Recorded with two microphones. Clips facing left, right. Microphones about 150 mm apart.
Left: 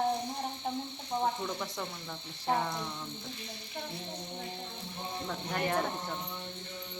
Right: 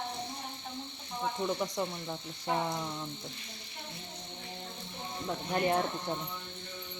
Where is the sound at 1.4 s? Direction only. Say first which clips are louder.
Right 5 dB; 20° right (ahead or behind).